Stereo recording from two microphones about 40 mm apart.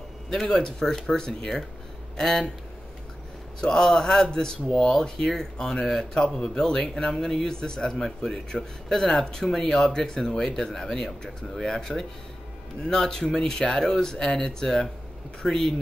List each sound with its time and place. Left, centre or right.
0.3 s speech: centre
3.6 s speech: centre